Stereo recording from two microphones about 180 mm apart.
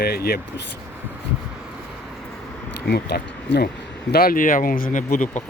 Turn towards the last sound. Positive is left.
turn(degrees=45)  # may be behind; listen again after turning